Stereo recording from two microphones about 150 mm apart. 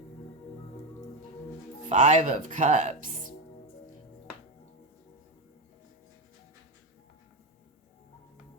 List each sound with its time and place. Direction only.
1.9 s speech: 55° right (ahead or behind)